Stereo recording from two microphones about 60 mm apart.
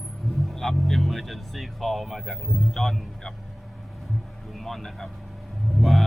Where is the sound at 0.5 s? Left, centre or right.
Centre.